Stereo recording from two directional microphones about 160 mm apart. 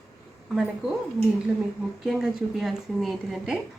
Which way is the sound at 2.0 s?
Centre (ahead or behind).